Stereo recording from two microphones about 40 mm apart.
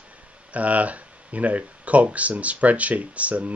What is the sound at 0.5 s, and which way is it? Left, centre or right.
Speech, right.